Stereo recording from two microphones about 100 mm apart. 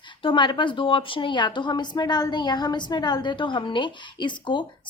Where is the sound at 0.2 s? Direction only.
55° left (ahead or behind).